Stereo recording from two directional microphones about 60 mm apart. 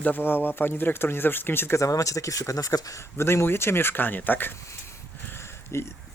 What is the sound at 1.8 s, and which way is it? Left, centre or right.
Speech, left.